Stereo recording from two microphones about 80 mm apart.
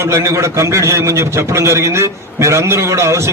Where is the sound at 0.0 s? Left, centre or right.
Right.